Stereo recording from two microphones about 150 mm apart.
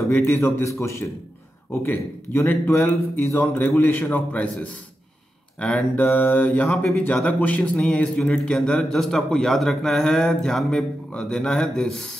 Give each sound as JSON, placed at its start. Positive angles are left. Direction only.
{"t": 0.1, "sound": "speech", "side_deg": 15}
{"t": 5.6, "sound": "speech", "side_deg": 10}